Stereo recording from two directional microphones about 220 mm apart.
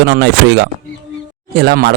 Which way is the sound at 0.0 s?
50° right (ahead or behind).